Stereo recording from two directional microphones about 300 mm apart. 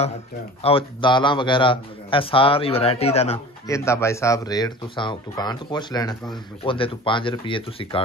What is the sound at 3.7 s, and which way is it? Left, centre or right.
Speech, centre.